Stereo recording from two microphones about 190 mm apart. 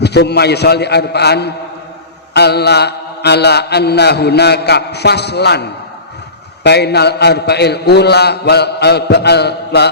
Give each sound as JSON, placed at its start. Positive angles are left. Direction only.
{"t": 0.0, "sound": "mantra", "side_deg": 60}